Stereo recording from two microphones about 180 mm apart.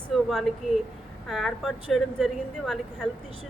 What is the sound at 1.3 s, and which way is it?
Speech, centre (ahead or behind).